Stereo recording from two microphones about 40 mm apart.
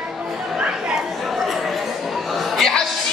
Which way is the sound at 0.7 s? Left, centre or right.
Right.